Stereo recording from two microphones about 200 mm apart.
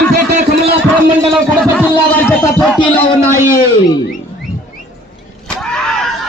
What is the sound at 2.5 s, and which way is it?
Speech, centre (ahead or behind).